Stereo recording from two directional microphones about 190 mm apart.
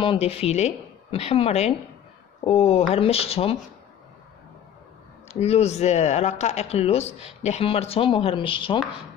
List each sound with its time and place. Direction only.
0.0 s speech: 30° left (ahead or behind)
5.3 s speech: 35° left (ahead or behind)